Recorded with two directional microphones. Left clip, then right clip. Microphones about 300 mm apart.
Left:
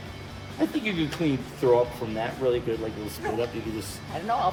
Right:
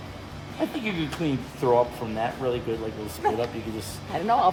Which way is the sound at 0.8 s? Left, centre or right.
Centre.